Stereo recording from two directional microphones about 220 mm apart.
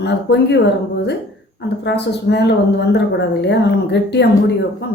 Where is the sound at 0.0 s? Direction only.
50° left (ahead or behind).